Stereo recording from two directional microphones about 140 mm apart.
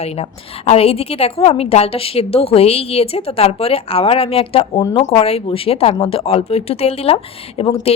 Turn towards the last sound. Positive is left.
turn(degrees=40)  # may be behind; listen again after turning